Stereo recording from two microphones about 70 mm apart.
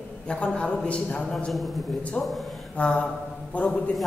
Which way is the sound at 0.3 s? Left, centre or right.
Centre.